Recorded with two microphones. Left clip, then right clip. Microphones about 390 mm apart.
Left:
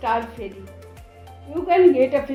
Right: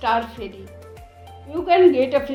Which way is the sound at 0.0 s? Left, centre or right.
Centre.